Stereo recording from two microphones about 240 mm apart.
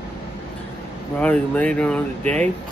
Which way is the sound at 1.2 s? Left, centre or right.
Centre.